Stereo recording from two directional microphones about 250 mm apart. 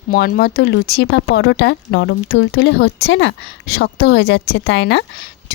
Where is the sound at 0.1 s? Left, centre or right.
Left.